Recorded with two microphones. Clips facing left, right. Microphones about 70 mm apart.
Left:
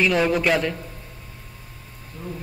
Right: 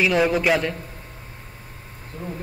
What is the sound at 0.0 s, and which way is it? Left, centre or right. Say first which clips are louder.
Speech: right 1 dB; centre.